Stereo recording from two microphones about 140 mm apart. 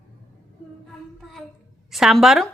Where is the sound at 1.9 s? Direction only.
Centre (ahead or behind).